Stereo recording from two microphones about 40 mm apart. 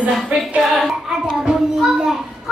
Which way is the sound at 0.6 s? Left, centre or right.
Centre.